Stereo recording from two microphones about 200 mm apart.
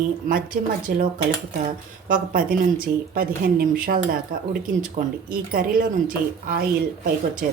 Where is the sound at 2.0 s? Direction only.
45° right (ahead or behind).